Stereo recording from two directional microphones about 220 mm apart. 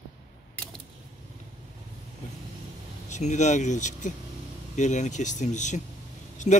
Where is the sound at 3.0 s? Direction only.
30° left (ahead or behind).